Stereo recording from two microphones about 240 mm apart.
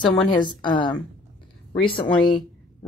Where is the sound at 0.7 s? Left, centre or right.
Centre.